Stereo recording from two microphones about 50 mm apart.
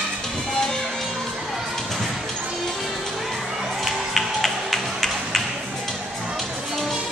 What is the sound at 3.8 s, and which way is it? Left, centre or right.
Music, centre.